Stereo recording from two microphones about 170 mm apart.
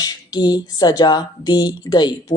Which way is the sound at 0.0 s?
25° left (ahead or behind).